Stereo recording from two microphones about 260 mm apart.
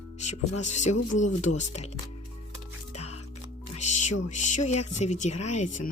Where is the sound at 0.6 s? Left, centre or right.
Left.